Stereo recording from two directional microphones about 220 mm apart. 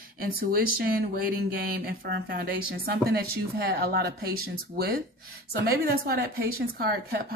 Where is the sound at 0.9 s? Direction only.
40° right (ahead or behind).